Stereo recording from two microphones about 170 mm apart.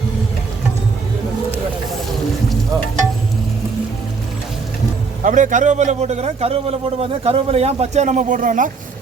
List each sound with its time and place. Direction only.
5.2 s a man's voice: 50° right (ahead or behind)